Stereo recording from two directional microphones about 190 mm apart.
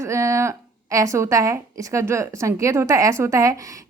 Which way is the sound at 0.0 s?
15° right (ahead or behind).